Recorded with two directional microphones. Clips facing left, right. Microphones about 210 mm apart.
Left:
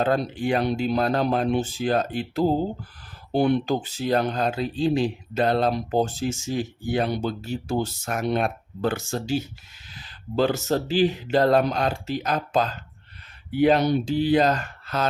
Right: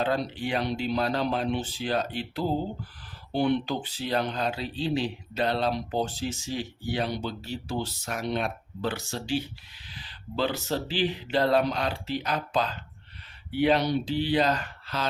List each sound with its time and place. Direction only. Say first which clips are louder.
0.0 s speech: left 5 dB; 45° left (ahead or behind)